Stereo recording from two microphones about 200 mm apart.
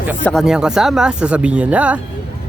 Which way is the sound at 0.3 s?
Centre (ahead or behind).